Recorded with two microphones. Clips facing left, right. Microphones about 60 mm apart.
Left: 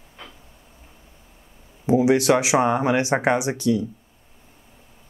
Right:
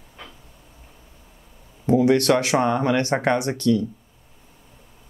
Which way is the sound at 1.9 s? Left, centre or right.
Centre.